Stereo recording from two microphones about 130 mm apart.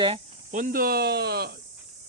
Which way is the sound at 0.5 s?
90° right.